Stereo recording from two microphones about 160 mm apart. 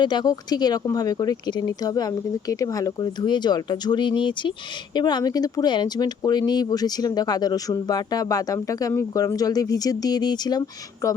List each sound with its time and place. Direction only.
0.0 s speech: 25° left (ahead or behind)